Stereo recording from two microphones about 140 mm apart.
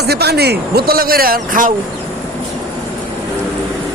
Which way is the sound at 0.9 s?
90° right.